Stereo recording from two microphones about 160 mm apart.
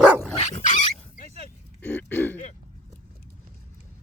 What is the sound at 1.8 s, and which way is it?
Throat clearing, 10° left (ahead or behind).